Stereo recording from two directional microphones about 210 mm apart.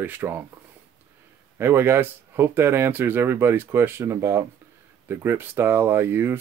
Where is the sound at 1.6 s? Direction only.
10° right (ahead or behind).